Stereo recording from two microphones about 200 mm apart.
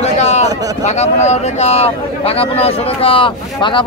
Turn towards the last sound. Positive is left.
turn(degrees=25)  # may be behind; listen again after turning